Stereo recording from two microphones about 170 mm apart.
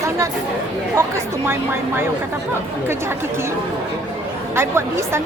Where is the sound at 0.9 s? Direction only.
15° right (ahead or behind).